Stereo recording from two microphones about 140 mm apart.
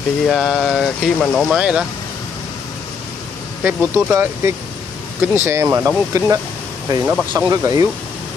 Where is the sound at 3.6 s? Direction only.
15° right (ahead or behind).